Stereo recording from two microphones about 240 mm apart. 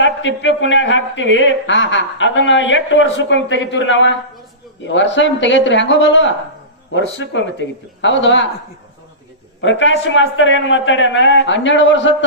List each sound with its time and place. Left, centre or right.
0.0 s speech: left
9.6 s speech: left